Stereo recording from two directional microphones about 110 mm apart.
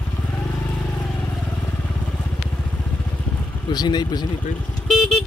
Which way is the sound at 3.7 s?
40° left (ahead or behind).